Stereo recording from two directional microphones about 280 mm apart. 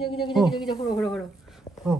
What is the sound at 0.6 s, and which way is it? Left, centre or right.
Speech, centre.